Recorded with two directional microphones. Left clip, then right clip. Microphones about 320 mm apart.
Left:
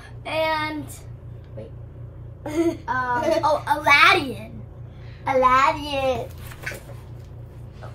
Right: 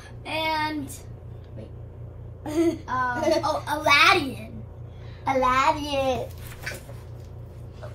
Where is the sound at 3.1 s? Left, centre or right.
Centre.